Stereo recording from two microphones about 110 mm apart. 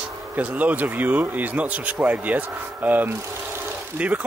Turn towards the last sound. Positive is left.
turn(degrees=-10)  # may be behind; listen again after turning